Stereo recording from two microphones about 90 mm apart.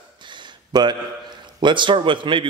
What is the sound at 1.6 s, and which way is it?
Speech, 60° right (ahead or behind).